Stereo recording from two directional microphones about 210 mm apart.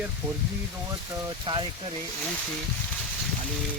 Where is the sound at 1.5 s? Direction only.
25° right (ahead or behind).